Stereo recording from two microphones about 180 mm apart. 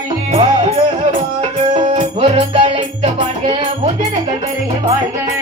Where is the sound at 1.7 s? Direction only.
35° right (ahead or behind).